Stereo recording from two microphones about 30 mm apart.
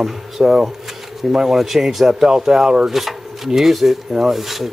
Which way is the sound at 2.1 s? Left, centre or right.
Centre.